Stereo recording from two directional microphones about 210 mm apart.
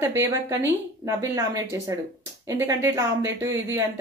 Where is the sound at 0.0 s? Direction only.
10° right (ahead or behind).